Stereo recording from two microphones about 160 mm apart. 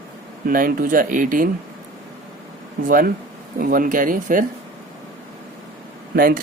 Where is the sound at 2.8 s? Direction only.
65° right (ahead or behind).